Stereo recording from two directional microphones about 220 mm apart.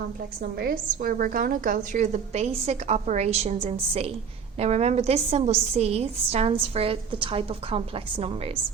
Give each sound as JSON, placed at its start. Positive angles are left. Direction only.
{"t": 0.6, "sound": "a woman's voice", "side_deg": -40}